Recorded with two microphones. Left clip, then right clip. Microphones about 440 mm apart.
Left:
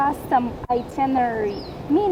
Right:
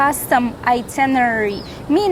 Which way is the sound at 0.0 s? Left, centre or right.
Right.